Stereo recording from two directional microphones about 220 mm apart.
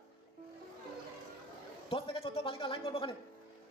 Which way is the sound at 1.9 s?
25° left (ahead or behind).